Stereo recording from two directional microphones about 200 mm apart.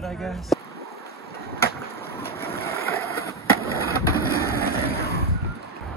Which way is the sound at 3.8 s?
50° left (ahead or behind).